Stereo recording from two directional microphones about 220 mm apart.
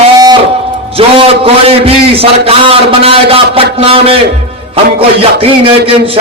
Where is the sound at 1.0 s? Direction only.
25° right (ahead or behind).